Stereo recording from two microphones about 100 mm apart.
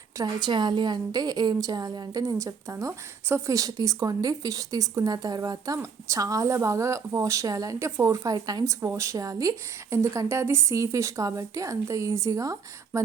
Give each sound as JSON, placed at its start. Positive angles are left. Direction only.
{"t": 0.2, "sound": "a woman's voice", "side_deg": -50}